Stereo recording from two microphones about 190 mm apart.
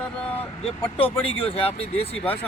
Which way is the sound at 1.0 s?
30° left (ahead or behind).